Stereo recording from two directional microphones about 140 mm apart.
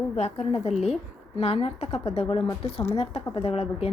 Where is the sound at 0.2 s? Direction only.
50° left (ahead or behind).